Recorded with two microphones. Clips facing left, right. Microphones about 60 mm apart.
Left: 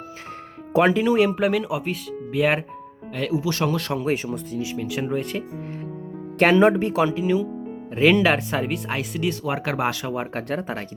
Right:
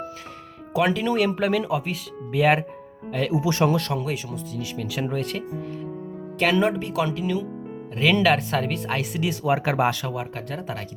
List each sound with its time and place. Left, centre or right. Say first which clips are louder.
0.9 s speech: left 3 dB; centre
3.3 s speech: right 2 dB; centre
3.8 s speech: even; centre
4.0 s speech: left 5 dB; left
4.6 s speech: left 3 dB; centre
4.9 s speech: left 1 dB; centre
6.4 s speech: left 5 dB; left; by 9.0 s centre
9.1 s speech: right 3 dB; centre
10.1 s speech: left 4 dB; left